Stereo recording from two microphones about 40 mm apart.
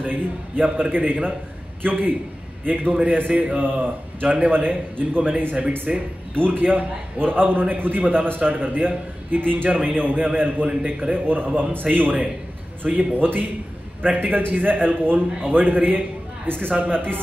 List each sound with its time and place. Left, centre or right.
0.0 s a man's voice: right